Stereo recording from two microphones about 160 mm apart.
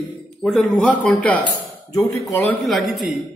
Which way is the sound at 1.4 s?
20° left (ahead or behind).